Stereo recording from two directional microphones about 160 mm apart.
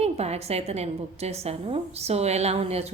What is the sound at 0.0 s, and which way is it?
A woman's voice, 40° right (ahead or behind).